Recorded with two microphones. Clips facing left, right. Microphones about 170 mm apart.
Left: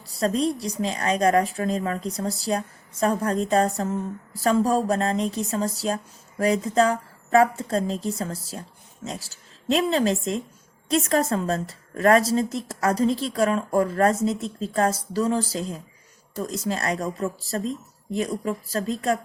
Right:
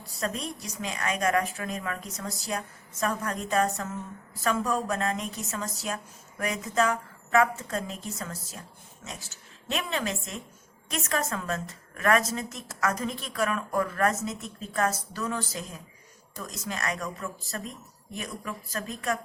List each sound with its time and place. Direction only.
0.2 s a woman's voice: 35° left (ahead or behind)